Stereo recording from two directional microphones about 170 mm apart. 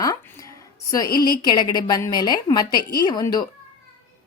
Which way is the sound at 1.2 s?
25° left (ahead or behind).